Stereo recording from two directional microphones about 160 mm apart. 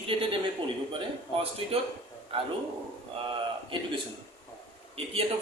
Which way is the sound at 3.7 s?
35° right (ahead or behind).